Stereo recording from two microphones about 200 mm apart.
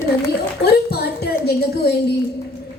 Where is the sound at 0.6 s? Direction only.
55° left (ahead or behind).